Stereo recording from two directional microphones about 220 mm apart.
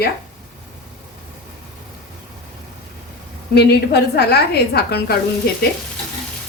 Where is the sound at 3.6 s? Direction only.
50° left (ahead or behind).